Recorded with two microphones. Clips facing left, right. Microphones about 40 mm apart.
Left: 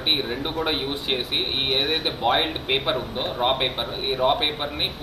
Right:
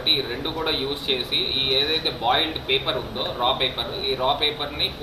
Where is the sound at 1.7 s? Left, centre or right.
Right.